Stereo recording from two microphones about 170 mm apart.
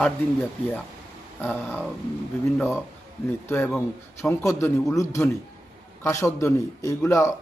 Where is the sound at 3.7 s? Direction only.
10° left (ahead or behind).